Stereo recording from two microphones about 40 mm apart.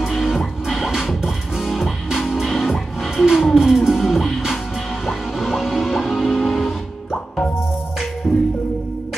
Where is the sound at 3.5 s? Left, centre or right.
Centre.